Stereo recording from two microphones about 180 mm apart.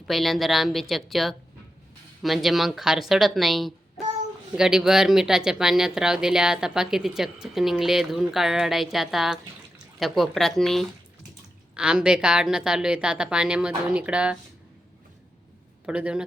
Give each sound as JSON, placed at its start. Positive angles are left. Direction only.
{"t": 0.1, "sound": "speech", "side_deg": 0}
{"t": 15.9, "sound": "speech", "side_deg": -5}